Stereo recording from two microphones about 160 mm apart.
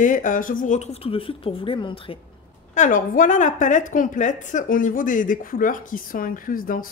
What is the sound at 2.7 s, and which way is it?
A woman's voice, 55° left (ahead or behind).